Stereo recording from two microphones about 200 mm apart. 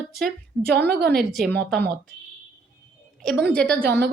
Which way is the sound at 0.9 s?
55° right (ahead or behind).